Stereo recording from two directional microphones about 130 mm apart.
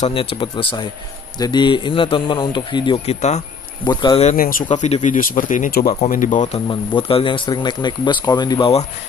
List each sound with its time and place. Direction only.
0.1 s speech: 45° left (ahead or behind)
3.1 s speech: 60° left (ahead or behind)
3.8 s speech: 35° left (ahead or behind)
4.2 s speech: 75° left (ahead or behind)
4.7 s speech: 65° left (ahead or behind)
6.7 s speech: 40° left (ahead or behind)